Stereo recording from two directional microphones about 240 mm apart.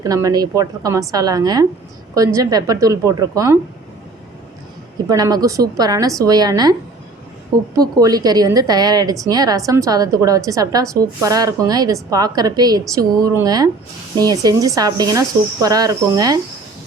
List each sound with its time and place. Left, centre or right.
0.0 s a woman's voice: centre
5.0 s a woman's voice: centre
7.8 s a woman's voice: centre